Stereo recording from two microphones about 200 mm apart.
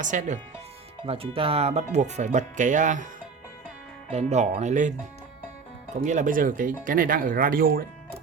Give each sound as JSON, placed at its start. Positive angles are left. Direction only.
{"t": 0.0, "sound": "speech", "side_deg": -40}
{"t": 4.1, "sound": "speech", "side_deg": -35}